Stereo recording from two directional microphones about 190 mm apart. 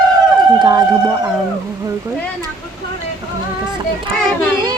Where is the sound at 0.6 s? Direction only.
20° right (ahead or behind).